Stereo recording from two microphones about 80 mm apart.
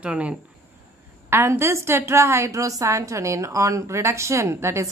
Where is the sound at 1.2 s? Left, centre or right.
Right.